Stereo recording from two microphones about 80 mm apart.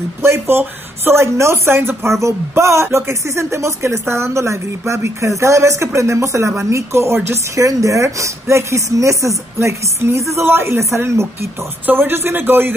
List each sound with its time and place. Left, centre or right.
0.2 s speech: right